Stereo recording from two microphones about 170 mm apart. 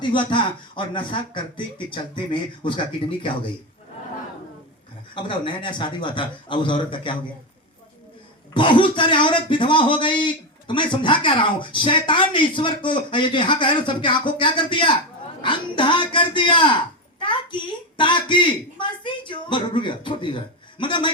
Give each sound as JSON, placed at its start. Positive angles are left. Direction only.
{"t": 0.0, "sound": "a man's voice", "side_deg": 30}
{"t": 5.1, "sound": "speech", "side_deg": 30}
{"t": 8.5, "sound": "a child's voice", "side_deg": 30}